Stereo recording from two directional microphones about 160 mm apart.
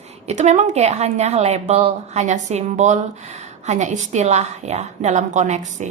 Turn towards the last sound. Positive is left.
turn(degrees=-45)  # may be behind; listen again after turning